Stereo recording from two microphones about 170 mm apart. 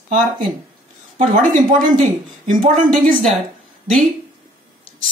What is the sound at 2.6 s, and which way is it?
Speech, 45° right (ahead or behind).